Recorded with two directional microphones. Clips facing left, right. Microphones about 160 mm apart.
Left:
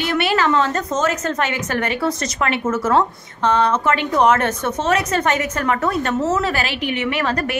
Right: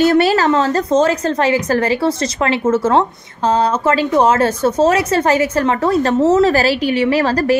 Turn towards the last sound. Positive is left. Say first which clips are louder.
# right 7 dB
turn(degrees=-35)  # may be behind; listen again after turning